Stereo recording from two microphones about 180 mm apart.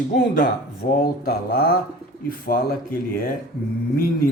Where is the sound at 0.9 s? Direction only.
55° left (ahead or behind).